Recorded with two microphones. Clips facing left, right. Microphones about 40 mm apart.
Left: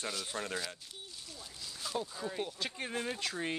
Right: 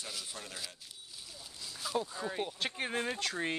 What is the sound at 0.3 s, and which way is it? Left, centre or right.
Speech, left.